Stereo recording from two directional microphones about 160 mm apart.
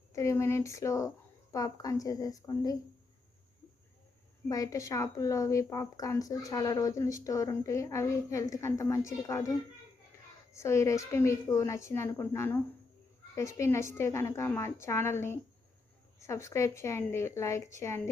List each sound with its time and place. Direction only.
0.1 s speech: 20° left (ahead or behind)
4.4 s speech: 20° left (ahead or behind)
10.5 s speech: 15° left (ahead or behind)